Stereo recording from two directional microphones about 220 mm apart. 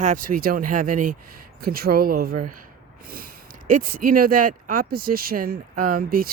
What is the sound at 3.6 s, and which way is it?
Speech, 40° right (ahead or behind).